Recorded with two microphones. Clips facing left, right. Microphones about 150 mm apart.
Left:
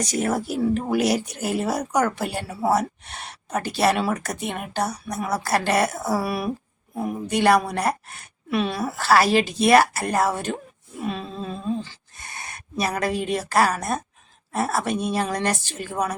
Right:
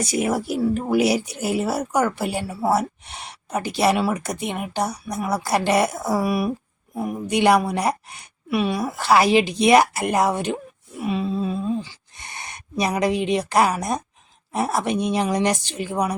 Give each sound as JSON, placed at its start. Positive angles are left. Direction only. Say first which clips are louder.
{"t": 0.0, "sound": "speech", "louder": "right 1 dB", "side_deg": -10}
{"t": 11.0, "sound": "a sound", "louder": "right 6 dB", "side_deg": -10}
{"t": 13.3, "sound": "speech", "louder": "right 2 dB", "side_deg": -15}